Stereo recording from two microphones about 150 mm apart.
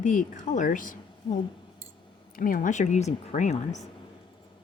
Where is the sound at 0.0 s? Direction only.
60° left (ahead or behind).